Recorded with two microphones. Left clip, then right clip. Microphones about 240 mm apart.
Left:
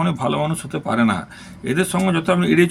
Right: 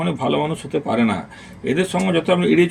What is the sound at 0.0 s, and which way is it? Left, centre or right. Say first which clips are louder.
Speech: right 1 dB; left.